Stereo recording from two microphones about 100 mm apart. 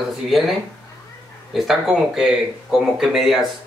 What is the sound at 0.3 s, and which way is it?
Speech, centre (ahead or behind).